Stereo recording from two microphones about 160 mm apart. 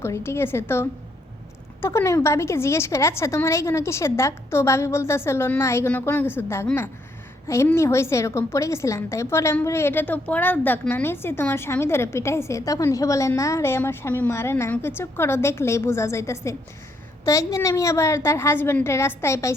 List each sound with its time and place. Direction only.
0.0 s a woman's voice: 15° left (ahead or behind)